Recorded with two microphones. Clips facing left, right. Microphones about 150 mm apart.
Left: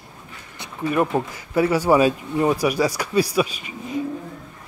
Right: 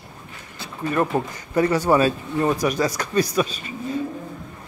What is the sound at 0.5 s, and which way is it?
Speech, 15° left (ahead or behind).